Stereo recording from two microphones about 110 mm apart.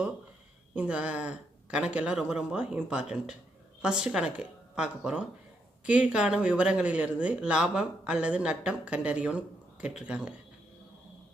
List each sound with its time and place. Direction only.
0.8 s speech: 10° right (ahead or behind)